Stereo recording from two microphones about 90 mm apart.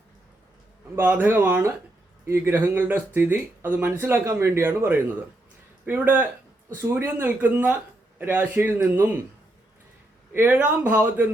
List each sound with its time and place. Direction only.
0.9 s speech: 20° right (ahead or behind)
10.3 s speech: 20° right (ahead or behind)